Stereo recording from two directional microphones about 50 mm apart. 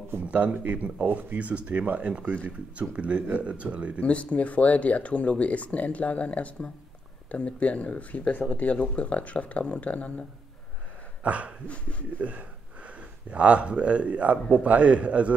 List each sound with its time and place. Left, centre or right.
0.2 s speech: right
1.4 s speech: right
4.0 s speech: left
8.4 s speech: left
8.6 s speech: left
11.2 s speech: right
11.6 s speech: left
12.2 s speech: right